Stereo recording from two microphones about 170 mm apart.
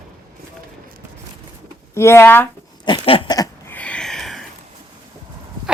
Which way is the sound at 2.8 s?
30° left (ahead or behind).